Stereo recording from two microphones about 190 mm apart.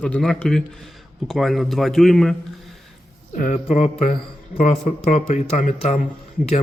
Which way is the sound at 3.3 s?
40° left (ahead or behind).